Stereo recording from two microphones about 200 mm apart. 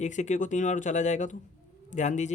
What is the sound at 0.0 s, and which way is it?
Speech, 35° left (ahead or behind).